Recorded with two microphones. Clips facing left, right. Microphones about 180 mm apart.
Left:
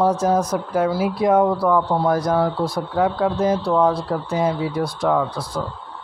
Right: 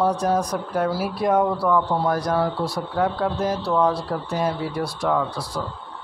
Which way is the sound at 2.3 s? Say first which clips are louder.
Left 3 dB; 5° left (ahead or behind).